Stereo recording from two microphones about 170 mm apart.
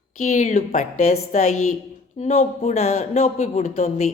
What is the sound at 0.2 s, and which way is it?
A woman's voice, 45° left (ahead or behind).